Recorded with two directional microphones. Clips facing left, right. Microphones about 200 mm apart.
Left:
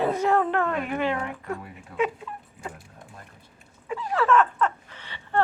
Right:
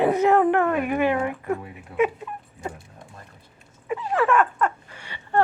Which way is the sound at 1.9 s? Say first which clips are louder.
Right 4 dB; 30° right (ahead or behind).